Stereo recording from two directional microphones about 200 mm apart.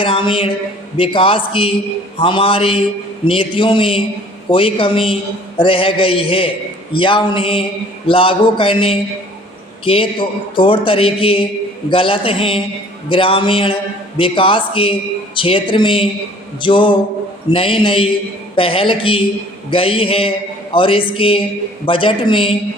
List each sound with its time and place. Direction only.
0.0 s a man's voice: 25° left (ahead or behind)